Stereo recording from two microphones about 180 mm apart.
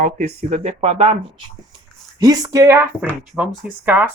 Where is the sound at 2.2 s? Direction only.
20° right (ahead or behind).